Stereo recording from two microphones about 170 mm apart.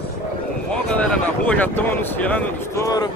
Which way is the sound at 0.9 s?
5° left (ahead or behind).